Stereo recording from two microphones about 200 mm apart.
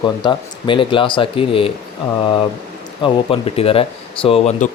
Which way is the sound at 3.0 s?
30° left (ahead or behind).